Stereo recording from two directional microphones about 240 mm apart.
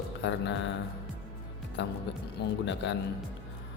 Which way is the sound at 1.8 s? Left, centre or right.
Left.